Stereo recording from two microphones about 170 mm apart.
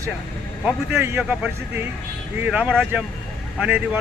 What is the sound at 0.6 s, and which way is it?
Speech, 10° right (ahead or behind).